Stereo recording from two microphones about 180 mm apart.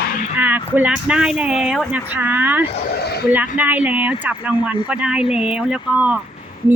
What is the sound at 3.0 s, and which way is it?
Speech, 65° left (ahead or behind).